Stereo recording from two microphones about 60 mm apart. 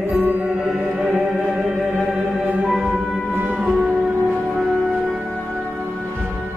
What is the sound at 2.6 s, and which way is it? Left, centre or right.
Music, centre.